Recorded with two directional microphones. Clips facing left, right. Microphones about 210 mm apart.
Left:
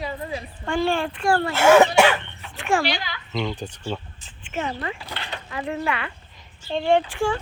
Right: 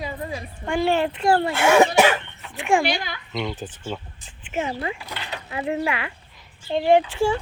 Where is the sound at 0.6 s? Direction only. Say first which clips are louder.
Right 2 dB; 15° right (ahead or behind).